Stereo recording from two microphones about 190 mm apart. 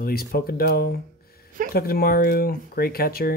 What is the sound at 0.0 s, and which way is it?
Speech, 55° left (ahead or behind).